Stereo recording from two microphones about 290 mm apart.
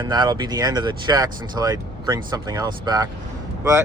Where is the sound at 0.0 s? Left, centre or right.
Centre.